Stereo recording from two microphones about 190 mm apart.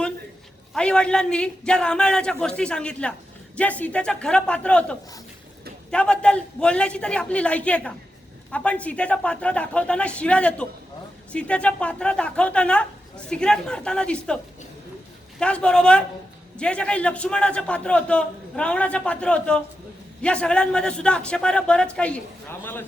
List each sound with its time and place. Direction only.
0.7 s speech: 5° left (ahead or behind)
15.4 s speech: 5° left (ahead or behind)